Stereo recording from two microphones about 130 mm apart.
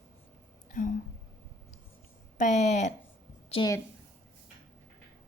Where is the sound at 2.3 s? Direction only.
65° left (ahead or behind).